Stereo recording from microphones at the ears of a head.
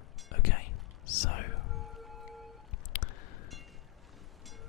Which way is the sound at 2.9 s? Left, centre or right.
Left.